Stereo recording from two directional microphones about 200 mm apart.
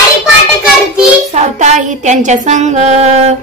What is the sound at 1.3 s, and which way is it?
Music, 35° right (ahead or behind).